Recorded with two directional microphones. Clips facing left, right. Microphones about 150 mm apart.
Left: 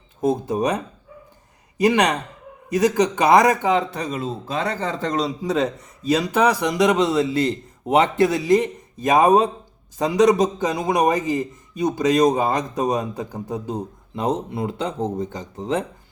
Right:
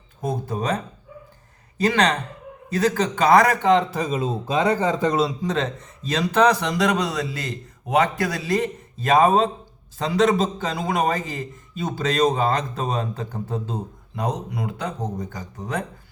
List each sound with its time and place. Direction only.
0.2 s speech: 20° left (ahead or behind)
1.8 s a man's voice: 15° left (ahead or behind)
4.2 s speech: 15° right (ahead or behind)
5.4 s a man's voice: 10° left (ahead or behind)
14.2 s speech: 25° left (ahead or behind)